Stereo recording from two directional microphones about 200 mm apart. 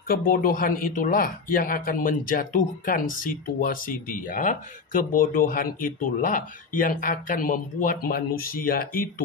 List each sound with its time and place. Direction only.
0.1 s speech: 45° left (ahead or behind)